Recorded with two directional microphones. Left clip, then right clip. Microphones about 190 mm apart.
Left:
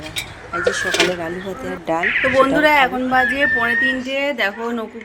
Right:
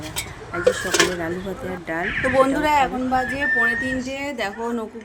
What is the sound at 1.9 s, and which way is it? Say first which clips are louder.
Speech: left 5 dB; 20° left (ahead or behind).